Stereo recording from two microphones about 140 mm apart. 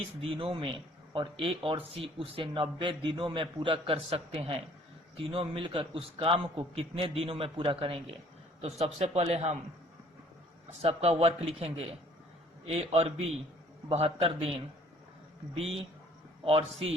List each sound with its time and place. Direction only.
0.2 s a man's voice: 40° right (ahead or behind)
10.7 s a man's voice: 45° right (ahead or behind)
15.5 s a man's voice: 45° right (ahead or behind)